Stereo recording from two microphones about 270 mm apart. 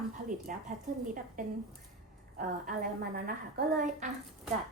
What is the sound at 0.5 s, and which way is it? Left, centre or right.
A woman's voice, right.